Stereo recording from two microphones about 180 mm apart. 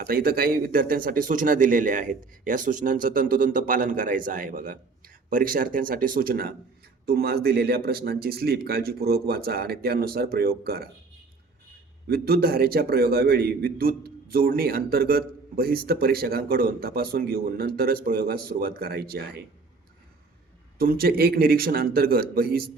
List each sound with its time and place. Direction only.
0.0 s a man's voice: 55° right (ahead or behind)
12.0 s a man's voice: 60° right (ahead or behind)
20.7 s a man's voice: 55° right (ahead or behind)